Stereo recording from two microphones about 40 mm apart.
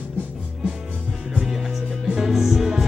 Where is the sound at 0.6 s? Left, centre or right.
Right.